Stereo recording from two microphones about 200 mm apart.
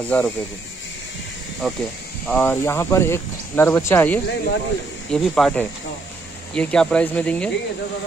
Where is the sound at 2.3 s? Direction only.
10° left (ahead or behind).